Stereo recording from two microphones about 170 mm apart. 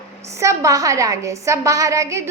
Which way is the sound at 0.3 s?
20° right (ahead or behind).